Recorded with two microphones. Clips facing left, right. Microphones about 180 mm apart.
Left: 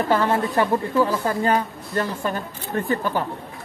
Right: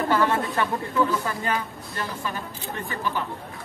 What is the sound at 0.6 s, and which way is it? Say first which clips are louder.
A woman's voice: left 7 dB; 35° left (ahead or behind).